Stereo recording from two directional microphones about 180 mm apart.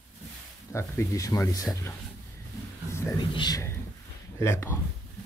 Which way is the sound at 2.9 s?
15° left (ahead or behind).